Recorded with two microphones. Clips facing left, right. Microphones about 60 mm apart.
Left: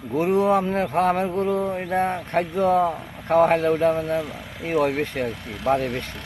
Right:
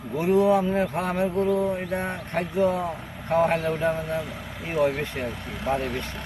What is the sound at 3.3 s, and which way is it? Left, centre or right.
Speech, left.